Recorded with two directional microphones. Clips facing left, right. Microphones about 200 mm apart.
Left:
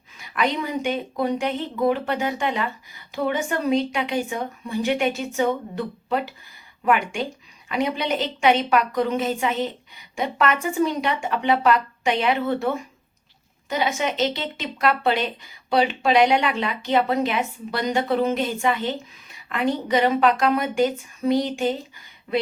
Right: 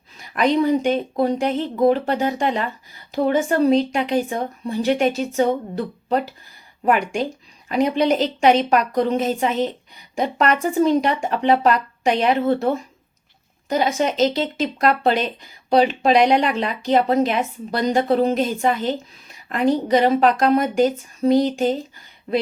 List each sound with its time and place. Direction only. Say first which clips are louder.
0.2 s a woman's voice: right 6 dB; 35° right (ahead or behind)